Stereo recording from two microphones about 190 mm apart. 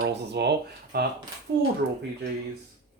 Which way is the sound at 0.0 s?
65° right (ahead or behind).